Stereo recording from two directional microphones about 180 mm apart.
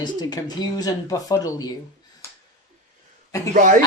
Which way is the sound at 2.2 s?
15° left (ahead or behind).